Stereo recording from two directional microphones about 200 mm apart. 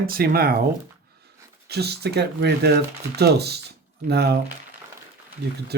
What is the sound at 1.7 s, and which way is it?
Speech, 55° right (ahead or behind).